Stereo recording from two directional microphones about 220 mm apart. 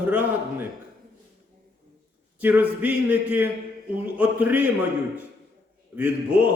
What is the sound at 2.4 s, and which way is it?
A man's voice, 10° right (ahead or behind).